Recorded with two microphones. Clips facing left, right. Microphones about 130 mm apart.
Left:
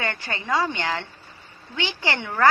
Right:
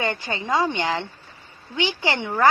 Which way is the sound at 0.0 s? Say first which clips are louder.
Right 3 dB; 20° right (ahead or behind).